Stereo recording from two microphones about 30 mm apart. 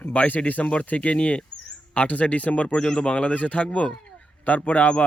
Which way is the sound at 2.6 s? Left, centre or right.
Left.